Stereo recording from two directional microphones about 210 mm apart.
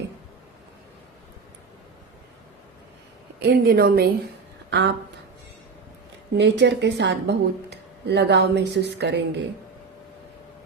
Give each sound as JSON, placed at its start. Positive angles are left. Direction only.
{"t": 3.4, "sound": "speech", "side_deg": -45}
{"t": 6.3, "sound": "speech", "side_deg": -55}